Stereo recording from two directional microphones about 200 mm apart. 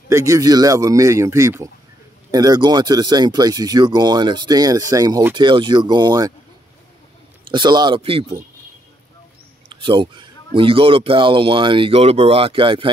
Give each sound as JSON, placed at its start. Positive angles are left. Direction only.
{"t": 0.1, "sound": "speech", "side_deg": -15}
{"t": 7.5, "sound": "speech", "side_deg": -20}
{"t": 9.7, "sound": "speech", "side_deg": -25}